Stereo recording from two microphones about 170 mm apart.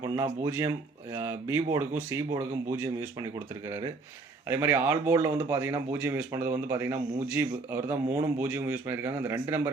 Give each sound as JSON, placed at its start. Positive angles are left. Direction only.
{"t": 0.0, "sound": "speech", "side_deg": -15}